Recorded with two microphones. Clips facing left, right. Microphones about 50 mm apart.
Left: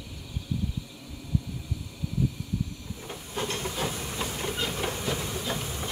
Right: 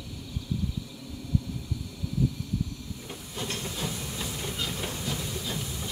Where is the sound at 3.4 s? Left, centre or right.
Left.